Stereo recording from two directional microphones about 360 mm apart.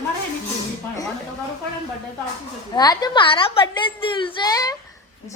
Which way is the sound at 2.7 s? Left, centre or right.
Centre.